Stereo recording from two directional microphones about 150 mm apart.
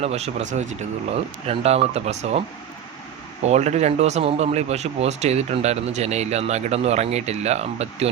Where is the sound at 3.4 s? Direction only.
50° right (ahead or behind).